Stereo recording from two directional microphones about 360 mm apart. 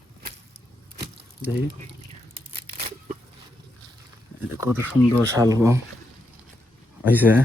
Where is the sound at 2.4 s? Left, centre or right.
Centre.